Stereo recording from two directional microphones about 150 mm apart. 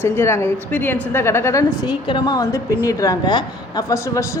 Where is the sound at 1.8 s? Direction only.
30° left (ahead or behind).